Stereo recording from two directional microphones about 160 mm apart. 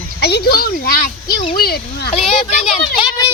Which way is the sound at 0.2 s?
90° left.